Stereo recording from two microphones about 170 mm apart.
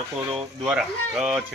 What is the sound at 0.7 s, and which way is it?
Speech, 5° right (ahead or behind).